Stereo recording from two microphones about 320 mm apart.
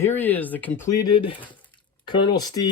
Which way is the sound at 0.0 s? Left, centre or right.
Centre.